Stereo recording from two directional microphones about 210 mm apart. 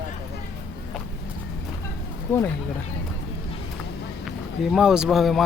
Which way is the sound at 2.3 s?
10° left (ahead or behind).